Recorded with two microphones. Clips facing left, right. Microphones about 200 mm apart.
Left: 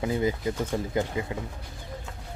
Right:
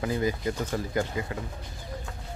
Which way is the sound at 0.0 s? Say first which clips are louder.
Left 1 dB; 20° left (ahead or behind).